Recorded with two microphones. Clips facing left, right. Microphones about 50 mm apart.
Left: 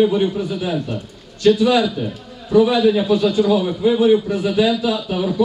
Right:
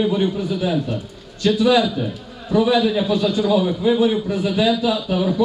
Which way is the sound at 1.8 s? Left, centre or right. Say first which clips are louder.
Left 1 dB; centre.